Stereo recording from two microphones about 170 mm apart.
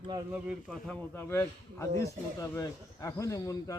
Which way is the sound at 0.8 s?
15° left (ahead or behind).